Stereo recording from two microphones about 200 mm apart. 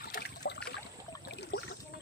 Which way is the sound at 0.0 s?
50° left (ahead or behind).